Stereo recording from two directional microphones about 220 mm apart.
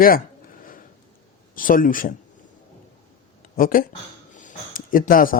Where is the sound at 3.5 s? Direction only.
40° left (ahead or behind).